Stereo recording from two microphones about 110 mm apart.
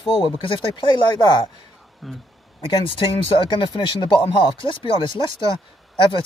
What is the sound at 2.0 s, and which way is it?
Speech, centre (ahead or behind).